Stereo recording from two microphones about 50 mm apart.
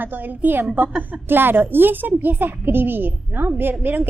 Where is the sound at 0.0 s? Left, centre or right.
Right.